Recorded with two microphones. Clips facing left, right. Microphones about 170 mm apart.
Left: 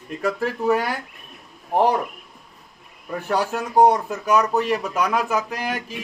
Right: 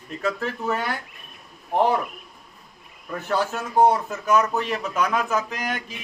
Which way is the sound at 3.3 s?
10° left (ahead or behind).